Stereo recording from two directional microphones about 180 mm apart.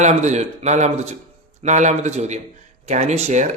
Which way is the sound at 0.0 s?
40° right (ahead or behind).